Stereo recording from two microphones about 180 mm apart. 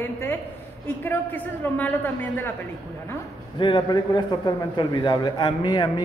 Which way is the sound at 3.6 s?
25° left (ahead or behind).